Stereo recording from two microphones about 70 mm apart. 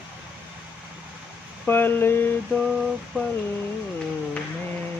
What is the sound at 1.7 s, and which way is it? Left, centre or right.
Speech, left.